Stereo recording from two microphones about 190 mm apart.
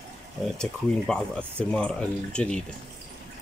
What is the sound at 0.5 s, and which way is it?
Speech, 5° left (ahead or behind).